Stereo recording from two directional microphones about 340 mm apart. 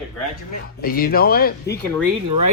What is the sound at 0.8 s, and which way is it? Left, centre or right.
Speech, left.